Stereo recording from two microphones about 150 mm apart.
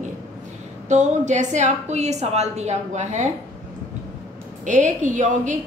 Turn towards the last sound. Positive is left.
turn(degrees=-55)  # may be behind; listen again after turning